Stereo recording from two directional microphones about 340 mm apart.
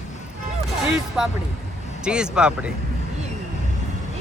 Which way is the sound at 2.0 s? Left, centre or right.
Centre.